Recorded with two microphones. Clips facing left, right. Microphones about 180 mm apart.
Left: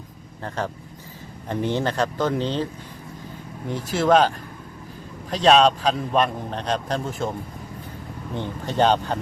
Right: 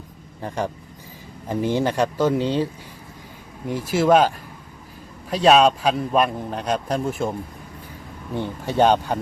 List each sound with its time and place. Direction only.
0.4 s a man's voice: 10° right (ahead or behind)
3.7 s a man's voice: 10° right (ahead or behind)
5.3 s a man's voice: 10° right (ahead or behind)
8.4 s a man's voice: 10° right (ahead or behind)